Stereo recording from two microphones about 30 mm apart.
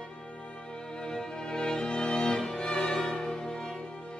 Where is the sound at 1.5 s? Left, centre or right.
Left.